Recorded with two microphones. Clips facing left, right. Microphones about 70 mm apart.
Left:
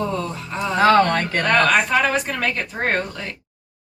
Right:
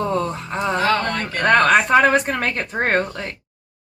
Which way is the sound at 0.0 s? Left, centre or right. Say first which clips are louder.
Right 3 dB; right.